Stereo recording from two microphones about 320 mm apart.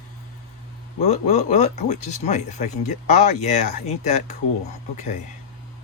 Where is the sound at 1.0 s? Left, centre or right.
Left.